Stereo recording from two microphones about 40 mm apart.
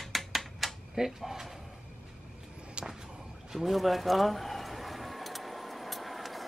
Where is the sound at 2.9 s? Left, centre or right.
Centre.